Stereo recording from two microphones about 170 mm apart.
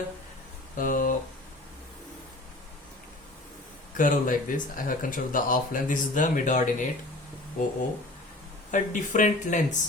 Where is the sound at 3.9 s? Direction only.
50° left (ahead or behind).